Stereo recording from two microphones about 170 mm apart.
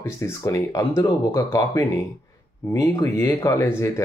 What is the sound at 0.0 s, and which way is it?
Speech, 15° left (ahead or behind).